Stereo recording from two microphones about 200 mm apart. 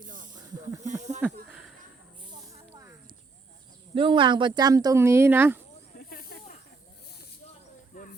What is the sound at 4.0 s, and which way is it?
Speech, 25° right (ahead or behind).